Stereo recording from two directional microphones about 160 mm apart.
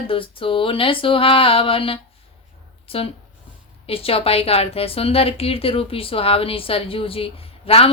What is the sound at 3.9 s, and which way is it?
A woman's voice, 35° left (ahead or behind).